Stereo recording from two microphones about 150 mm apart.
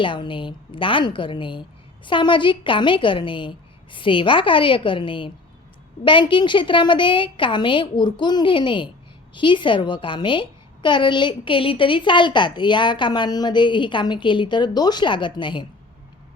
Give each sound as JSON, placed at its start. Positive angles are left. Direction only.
{"t": 0.0, "sound": "a woman's voice", "side_deg": 35}